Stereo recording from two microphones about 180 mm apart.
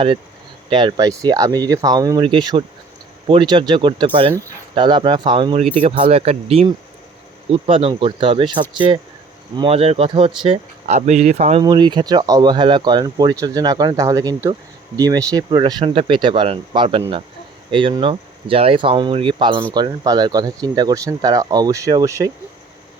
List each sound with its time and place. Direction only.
0.7 s speech: 25° right (ahead or behind)
11.6 s speech: 25° right (ahead or behind)